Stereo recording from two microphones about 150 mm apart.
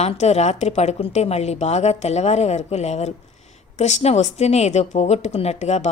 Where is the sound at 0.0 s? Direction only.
45° left (ahead or behind).